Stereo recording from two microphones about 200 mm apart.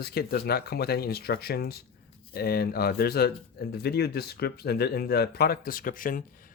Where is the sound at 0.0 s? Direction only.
50° left (ahead or behind).